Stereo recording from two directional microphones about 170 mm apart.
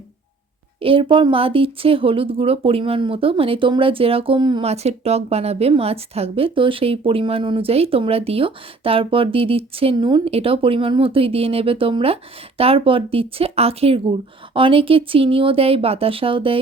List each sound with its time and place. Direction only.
0.8 s speech: 30° right (ahead or behind)